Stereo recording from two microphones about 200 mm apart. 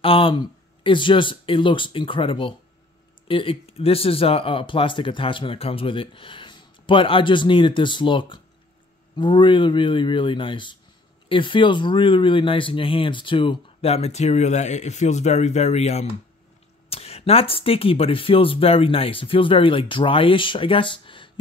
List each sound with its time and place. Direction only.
0.0 s speech: 25° left (ahead or behind)